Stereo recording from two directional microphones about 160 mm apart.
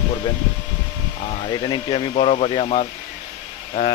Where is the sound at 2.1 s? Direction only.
40° left (ahead or behind).